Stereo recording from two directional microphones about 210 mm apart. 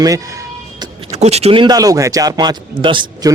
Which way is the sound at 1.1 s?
30° right (ahead or behind).